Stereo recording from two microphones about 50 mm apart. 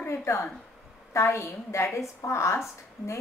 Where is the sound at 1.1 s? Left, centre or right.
Left.